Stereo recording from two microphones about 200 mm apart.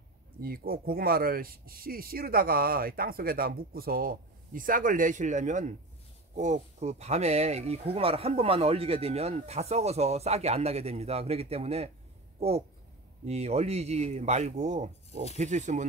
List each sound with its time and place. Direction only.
0.4 s speech: 45° right (ahead or behind)